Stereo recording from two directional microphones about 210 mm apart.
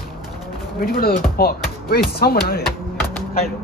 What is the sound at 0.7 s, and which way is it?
Speech, 45° left (ahead or behind).